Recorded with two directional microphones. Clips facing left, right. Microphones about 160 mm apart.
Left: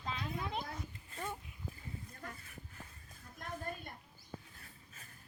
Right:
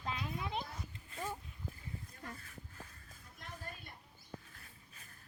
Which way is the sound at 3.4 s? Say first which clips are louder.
Left 6 dB; 50° left (ahead or behind).